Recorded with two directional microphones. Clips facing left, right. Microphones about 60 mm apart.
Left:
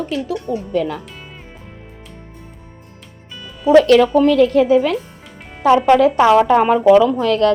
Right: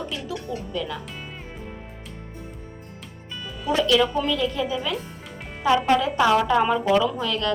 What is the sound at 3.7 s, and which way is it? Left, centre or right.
A woman's voice, left.